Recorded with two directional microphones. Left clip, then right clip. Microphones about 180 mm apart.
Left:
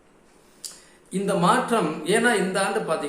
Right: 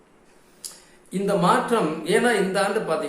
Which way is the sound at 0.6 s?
5° left (ahead or behind).